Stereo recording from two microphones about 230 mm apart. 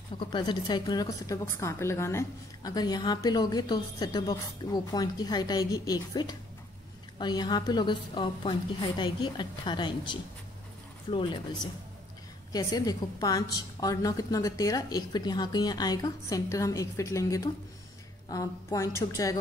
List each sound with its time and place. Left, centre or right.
0.2 s a woman's voice: centre